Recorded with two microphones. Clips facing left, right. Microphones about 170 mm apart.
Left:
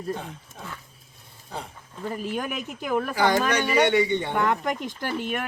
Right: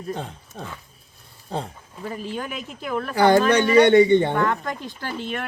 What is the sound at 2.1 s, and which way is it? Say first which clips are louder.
Speech: left 1 dB; 10° left (ahead or behind).